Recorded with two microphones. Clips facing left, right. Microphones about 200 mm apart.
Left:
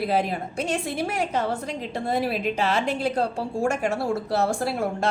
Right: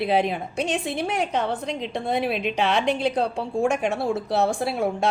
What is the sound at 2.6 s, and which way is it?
Speech, 65° right (ahead or behind).